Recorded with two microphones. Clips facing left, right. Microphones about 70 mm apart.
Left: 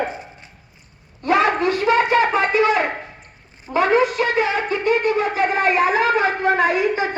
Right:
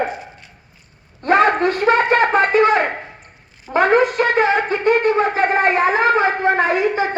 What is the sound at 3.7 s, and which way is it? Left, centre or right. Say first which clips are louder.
Wind instrument: right 2 dB; right.